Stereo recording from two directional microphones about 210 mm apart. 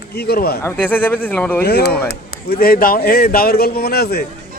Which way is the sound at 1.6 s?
45° left (ahead or behind).